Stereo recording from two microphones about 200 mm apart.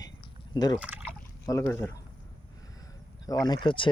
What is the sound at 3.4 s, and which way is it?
Speech, 20° left (ahead or behind).